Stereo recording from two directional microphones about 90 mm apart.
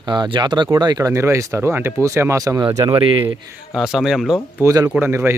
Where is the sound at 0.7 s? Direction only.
45° right (ahead or behind).